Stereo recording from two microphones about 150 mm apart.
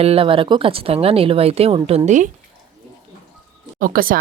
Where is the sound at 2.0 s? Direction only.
55° right (ahead or behind).